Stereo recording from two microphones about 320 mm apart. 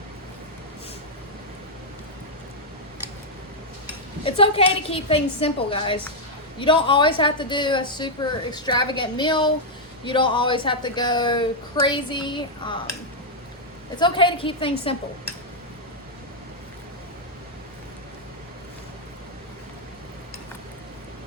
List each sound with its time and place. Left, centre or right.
4.2 s a woman's voice: centre
14.0 s a woman's voice: centre